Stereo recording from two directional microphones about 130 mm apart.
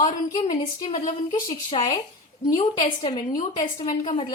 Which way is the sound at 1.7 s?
40° left (ahead or behind).